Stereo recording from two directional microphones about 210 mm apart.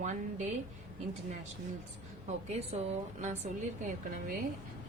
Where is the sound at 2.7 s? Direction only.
30° right (ahead or behind).